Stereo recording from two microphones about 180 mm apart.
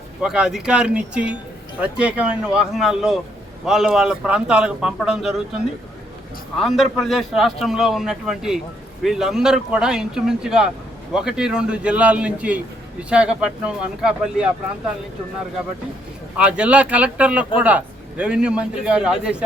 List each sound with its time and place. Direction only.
0.2 s a man's voice: 5° right (ahead or behind)
6.6 s a man's voice: centre (ahead or behind)
16.4 s a man's voice: 5° right (ahead or behind)